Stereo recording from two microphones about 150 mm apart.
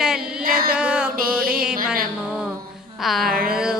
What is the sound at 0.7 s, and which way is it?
Music, 5° right (ahead or behind).